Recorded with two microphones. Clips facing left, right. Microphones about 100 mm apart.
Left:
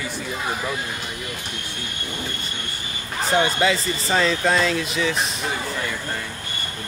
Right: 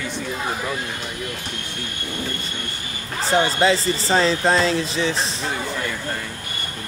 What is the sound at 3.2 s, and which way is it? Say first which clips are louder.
Speech: right 2 dB; 30° right (ahead or behind).